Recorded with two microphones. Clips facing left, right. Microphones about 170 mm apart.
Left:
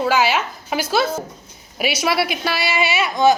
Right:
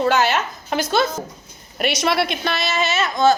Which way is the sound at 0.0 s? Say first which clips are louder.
Even; 5° left (ahead or behind).